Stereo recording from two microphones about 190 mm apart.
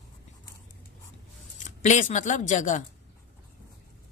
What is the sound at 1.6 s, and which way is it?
Speech, 40° left (ahead or behind).